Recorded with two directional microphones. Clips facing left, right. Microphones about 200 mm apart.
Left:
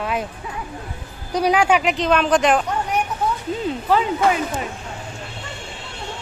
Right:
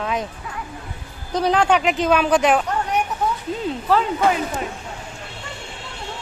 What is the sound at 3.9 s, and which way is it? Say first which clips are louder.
Speech: even; 5° left (ahead or behind).